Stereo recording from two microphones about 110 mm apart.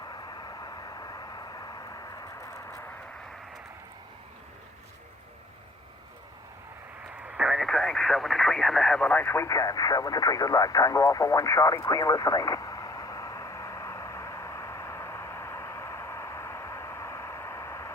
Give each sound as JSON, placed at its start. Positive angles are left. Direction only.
{"t": 0.0, "sound": "vehicle", "side_deg": 40}
{"t": 7.3, "sound": "radio", "side_deg": -10}